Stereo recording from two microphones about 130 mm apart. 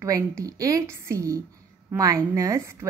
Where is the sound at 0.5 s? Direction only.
25° right (ahead or behind).